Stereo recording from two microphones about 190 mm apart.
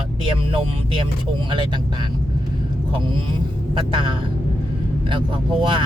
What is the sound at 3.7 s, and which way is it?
Speech, 25° right (ahead or behind).